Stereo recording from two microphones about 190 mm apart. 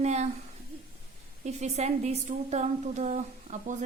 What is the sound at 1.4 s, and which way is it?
A woman's voice, 35° right (ahead or behind).